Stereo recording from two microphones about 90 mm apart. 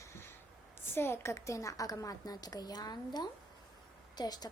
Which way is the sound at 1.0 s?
25° left (ahead or behind).